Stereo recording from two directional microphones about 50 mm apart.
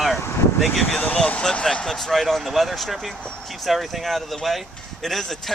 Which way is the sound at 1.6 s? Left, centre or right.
Centre.